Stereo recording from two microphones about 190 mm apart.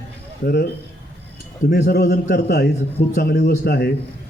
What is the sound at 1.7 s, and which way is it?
A man's voice, 60° left (ahead or behind).